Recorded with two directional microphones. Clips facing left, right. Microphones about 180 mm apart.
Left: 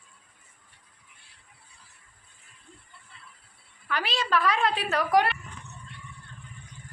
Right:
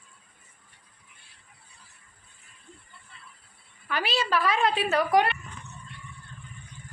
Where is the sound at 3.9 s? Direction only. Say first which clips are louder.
Even; 5° right (ahead or behind).